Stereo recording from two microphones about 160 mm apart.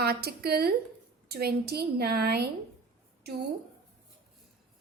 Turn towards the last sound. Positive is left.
turn(degrees=-90)